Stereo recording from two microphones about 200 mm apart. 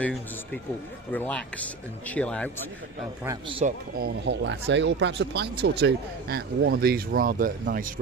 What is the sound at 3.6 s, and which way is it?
Speech, 50° right (ahead or behind).